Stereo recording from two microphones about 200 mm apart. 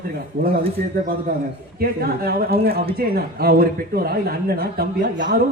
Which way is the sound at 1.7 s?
50° right (ahead or behind).